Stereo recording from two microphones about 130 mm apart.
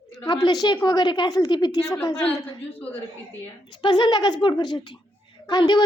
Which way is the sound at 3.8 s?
35° left (ahead or behind).